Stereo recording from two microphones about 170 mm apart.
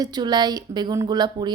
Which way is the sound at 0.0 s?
25° right (ahead or behind).